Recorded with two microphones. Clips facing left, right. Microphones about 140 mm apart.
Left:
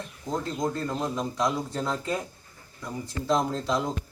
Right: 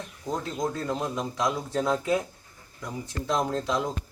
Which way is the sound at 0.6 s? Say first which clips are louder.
Right 1 dB; 5° right (ahead or behind).